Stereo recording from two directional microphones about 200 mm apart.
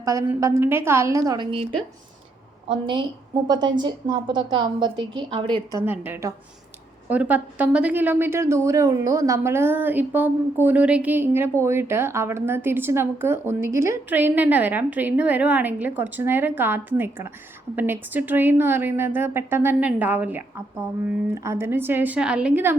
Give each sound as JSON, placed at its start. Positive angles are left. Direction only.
{"t": 0.0, "sound": "a woman's voice", "side_deg": -15}
{"t": 5.8, "sound": "a woman's voice", "side_deg": -10}